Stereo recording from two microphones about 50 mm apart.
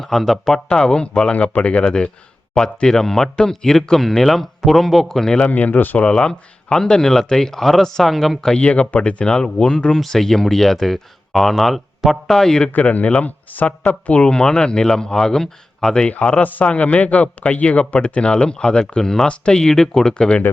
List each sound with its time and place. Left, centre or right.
0.0 s speech: centre
5.4 s speech: left
6.0 s speech: centre
8.4 s a man's voice: centre
12.7 s speech: left; by 16.0 s centre
16.0 s a man's voice: left